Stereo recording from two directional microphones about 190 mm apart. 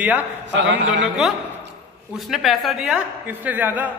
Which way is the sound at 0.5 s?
70° right (ahead or behind).